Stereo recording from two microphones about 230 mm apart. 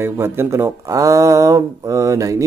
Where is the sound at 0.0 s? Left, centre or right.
Centre.